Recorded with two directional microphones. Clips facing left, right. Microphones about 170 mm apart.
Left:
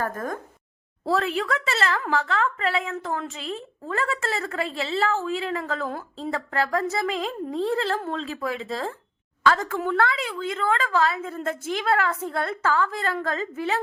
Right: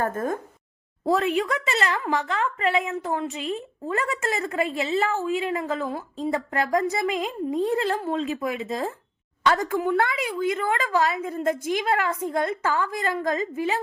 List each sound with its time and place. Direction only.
0.0 s a woman's voice: 25° right (ahead or behind)
1.5 s a woman's voice: 15° right (ahead or behind)
3.2 s a woman's voice: centre (ahead or behind)
3.8 s a woman's voice: 15° right (ahead or behind)
6.3 s a woman's voice: 15° right (ahead or behind)